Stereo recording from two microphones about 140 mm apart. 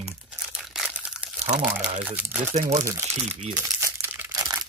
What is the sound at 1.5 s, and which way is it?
Speech, 5° right (ahead or behind).